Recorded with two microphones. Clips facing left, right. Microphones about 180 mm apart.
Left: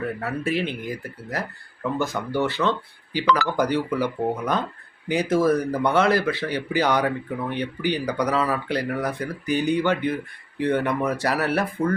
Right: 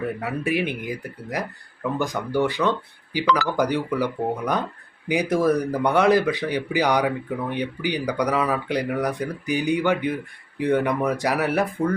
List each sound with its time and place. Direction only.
0.0 s speech: 15° right (ahead or behind)